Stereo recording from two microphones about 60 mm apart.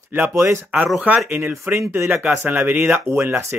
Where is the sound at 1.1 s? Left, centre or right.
Right.